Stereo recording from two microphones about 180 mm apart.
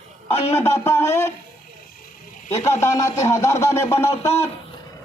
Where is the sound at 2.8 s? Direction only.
15° left (ahead or behind).